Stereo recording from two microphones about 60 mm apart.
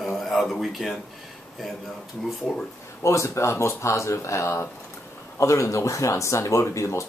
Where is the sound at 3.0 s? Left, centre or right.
Left.